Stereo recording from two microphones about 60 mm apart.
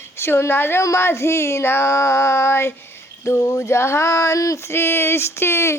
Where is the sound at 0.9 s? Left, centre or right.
Left.